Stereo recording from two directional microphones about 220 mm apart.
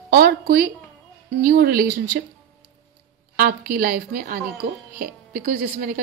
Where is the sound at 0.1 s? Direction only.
45° right (ahead or behind).